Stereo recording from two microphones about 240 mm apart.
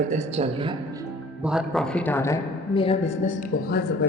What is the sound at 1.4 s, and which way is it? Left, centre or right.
Speech, centre.